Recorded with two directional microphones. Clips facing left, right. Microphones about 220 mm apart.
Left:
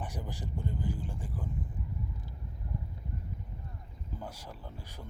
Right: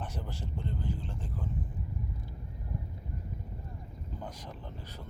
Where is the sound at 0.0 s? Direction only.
15° left (ahead or behind).